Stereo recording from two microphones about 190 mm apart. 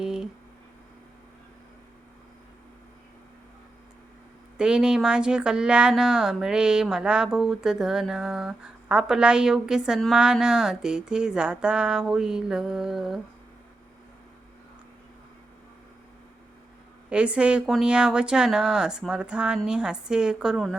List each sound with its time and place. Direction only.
0.0 s a sound: 5° right (ahead or behind)
4.5 s speech: 5° right (ahead or behind)
17.1 s speech: 5° right (ahead or behind)